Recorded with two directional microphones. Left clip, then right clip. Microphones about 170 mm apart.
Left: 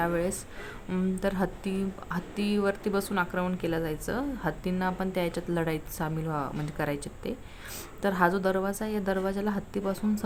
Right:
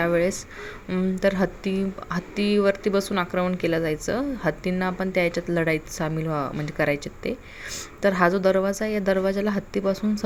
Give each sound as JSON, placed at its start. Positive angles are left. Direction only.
{"t": 0.0, "sound": "speech", "side_deg": -15}